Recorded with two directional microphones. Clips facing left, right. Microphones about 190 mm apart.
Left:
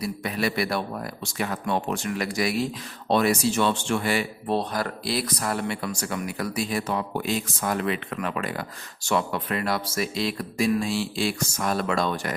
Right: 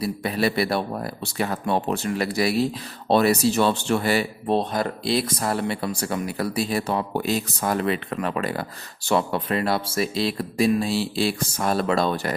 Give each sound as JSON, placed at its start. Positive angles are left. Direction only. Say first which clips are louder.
{"t": 0.0, "sound": "speech", "louder": "right 4 dB", "side_deg": -30}
{"t": 4.4, "sound": "speech", "louder": "right 4 dB", "side_deg": -25}